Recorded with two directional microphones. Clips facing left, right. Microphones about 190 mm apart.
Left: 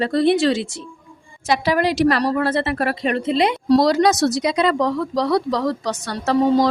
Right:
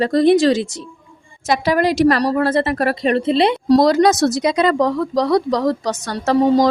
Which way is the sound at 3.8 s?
50° right (ahead or behind).